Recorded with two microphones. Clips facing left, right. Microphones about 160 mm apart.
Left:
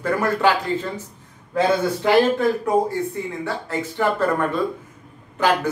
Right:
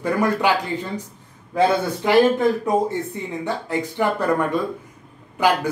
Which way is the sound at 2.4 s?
20° right (ahead or behind).